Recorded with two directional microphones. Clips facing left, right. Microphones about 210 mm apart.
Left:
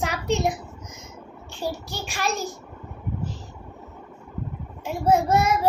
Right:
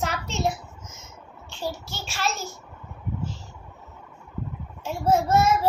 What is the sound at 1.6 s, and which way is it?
Speech, 15° left (ahead or behind).